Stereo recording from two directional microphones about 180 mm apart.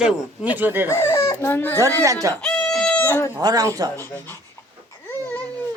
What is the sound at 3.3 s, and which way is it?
Speech, 20° right (ahead or behind).